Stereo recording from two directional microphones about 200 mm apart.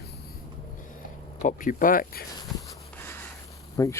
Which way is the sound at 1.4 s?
40° left (ahead or behind).